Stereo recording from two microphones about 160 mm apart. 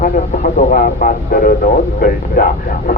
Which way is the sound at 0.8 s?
60° left (ahead or behind).